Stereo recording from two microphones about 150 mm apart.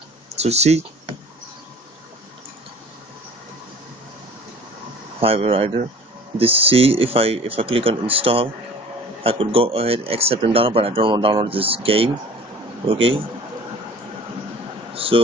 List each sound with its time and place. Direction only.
0.4 s speech: 45° right (ahead or behind)
5.2 s speech: 40° right (ahead or behind)
15.0 s speech: 40° right (ahead or behind)